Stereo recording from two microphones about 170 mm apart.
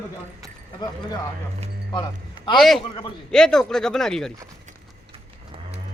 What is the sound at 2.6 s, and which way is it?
A man's voice, centre (ahead or behind).